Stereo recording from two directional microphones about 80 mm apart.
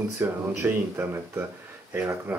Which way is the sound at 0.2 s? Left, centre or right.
Right.